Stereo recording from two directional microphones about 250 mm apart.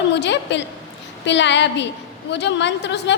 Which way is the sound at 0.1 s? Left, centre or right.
Left.